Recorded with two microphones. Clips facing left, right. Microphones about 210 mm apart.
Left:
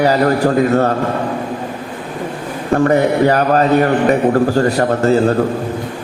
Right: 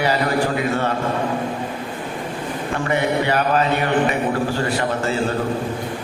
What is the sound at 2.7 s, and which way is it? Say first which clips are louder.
A man's voice: left 9 dB; 40° left (ahead or behind).